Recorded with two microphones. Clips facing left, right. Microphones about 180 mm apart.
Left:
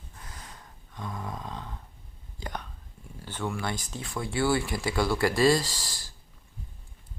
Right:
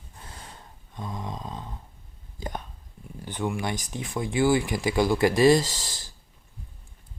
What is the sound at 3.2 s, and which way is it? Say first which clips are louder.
Speech: right 3 dB; 15° right (ahead or behind).